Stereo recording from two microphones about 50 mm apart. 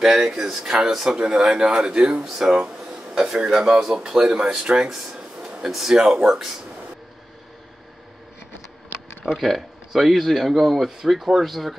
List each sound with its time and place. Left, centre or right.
0.2 s speech: centre
2.6 s a sound: centre
3.3 s speech: centre
9.4 s speech: centre